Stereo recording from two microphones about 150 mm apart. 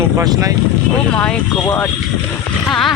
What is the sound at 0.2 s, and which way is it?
Speech, 25° right (ahead or behind).